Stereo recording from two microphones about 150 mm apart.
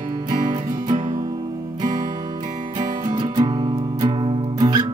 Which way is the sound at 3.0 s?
30° right (ahead or behind).